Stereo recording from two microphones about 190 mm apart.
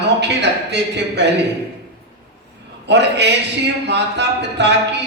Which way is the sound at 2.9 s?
65° right (ahead or behind).